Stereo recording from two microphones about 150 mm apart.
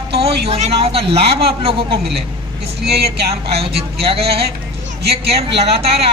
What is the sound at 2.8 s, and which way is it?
Speech, 90° right.